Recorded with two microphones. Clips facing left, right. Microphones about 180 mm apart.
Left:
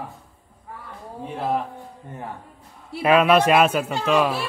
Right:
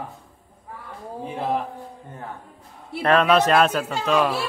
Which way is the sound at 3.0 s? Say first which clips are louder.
Left 1 dB; 10° left (ahead or behind).